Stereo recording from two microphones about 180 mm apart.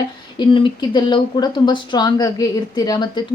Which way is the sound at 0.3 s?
25° left (ahead or behind).